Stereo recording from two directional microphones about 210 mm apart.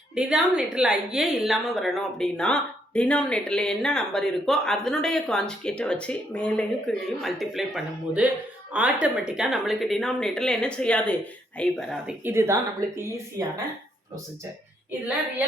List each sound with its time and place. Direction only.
0.1 s a woman's voice: 5° right (ahead or behind)
12.2 s a woman's voice: 10° right (ahead or behind)